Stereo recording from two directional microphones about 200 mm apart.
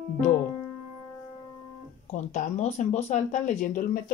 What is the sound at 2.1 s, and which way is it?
Speech, 35° left (ahead or behind).